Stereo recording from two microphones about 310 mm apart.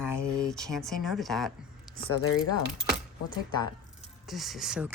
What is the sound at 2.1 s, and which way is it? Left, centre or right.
Speech, left.